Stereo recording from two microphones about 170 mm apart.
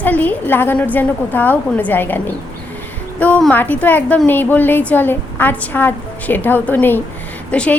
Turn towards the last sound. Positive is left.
turn(degrees=10)  # may be behind; listen again after turning